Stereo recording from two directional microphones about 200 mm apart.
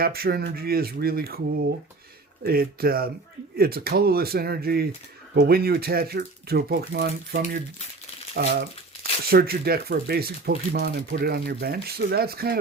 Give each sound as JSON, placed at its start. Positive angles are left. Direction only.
{"t": 0.0, "sound": "speech", "side_deg": -50}
{"t": 2.4, "sound": "speech", "side_deg": -50}